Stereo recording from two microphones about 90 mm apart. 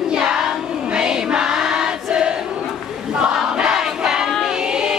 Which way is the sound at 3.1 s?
10° right (ahead or behind).